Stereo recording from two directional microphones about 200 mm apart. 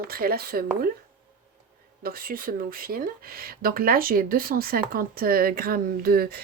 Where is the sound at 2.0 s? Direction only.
45° right (ahead or behind).